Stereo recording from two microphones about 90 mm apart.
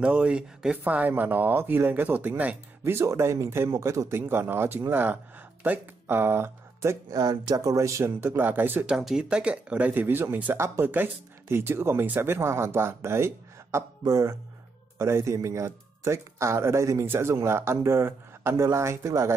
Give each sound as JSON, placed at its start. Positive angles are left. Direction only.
{"t": 0.0, "sound": "speech", "side_deg": -15}
{"t": 2.8, "sound": "speech", "side_deg": -30}
{"t": 7.1, "sound": "speech", "side_deg": -45}
{"t": 8.8, "sound": "speech", "side_deg": -10}